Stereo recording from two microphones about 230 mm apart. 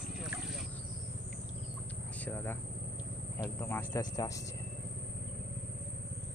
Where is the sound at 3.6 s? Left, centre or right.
Centre.